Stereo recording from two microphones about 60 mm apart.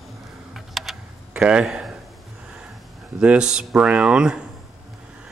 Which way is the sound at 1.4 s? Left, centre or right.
Centre.